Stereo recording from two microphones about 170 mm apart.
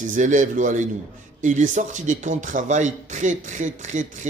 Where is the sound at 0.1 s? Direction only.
50° right (ahead or behind).